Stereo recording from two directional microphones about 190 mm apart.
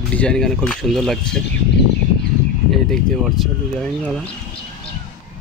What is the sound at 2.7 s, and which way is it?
Speech, centre (ahead or behind).